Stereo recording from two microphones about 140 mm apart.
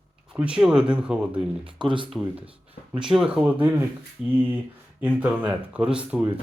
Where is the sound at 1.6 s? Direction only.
35° right (ahead or behind).